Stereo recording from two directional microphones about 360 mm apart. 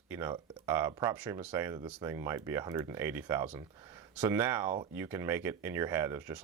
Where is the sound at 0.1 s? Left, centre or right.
Centre.